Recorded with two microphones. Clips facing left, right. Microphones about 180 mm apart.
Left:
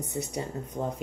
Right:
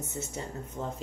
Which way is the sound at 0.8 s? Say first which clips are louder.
Left 5 dB; 20° left (ahead or behind).